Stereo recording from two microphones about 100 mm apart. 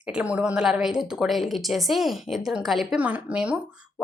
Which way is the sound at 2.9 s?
15° right (ahead or behind).